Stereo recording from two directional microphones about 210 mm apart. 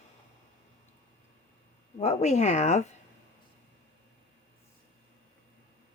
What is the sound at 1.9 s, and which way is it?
Speech, 35° left (ahead or behind).